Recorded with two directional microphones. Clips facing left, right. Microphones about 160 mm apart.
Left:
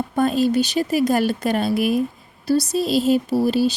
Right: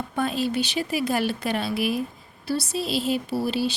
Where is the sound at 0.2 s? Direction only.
45° left (ahead or behind).